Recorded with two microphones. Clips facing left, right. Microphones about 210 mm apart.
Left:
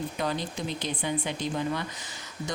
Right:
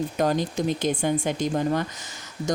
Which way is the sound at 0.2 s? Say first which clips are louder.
Right 9 dB; 45° right (ahead or behind).